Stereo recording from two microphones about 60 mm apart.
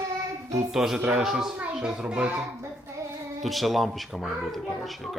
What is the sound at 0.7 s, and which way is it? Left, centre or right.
A child's voice, centre.